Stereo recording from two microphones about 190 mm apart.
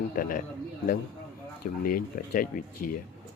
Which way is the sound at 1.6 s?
50° left (ahead or behind).